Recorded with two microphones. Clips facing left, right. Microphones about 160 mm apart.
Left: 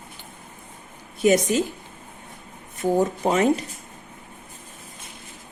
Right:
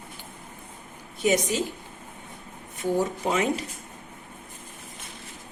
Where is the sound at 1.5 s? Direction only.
50° left (ahead or behind).